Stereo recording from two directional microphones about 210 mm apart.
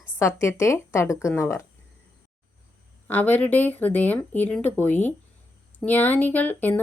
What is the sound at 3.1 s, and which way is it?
Speech, 10° left (ahead or behind).